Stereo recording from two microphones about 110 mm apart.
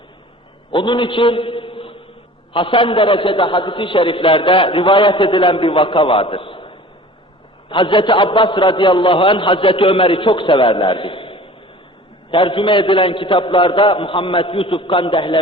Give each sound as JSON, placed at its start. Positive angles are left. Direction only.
{"t": 0.7, "sound": "a man's voice", "side_deg": 45}